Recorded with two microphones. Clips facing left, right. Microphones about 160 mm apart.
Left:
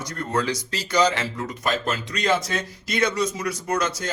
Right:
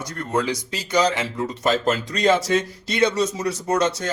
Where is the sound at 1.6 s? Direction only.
35° right (ahead or behind).